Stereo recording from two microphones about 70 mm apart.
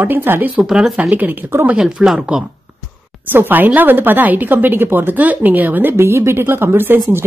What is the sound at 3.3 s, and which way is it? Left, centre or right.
A woman's voice, right.